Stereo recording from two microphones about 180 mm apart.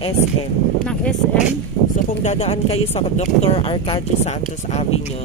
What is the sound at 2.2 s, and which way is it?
A man's voice, 35° left (ahead or behind).